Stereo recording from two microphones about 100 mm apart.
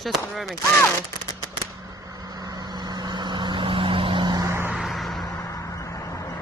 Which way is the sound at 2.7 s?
45° right (ahead or behind).